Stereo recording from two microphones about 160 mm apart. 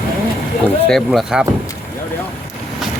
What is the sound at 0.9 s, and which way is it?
Speech, centre (ahead or behind).